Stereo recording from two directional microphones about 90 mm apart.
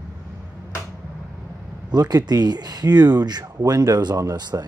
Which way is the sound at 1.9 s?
45° right (ahead or behind).